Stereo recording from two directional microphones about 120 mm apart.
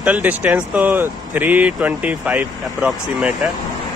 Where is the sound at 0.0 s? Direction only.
15° right (ahead or behind).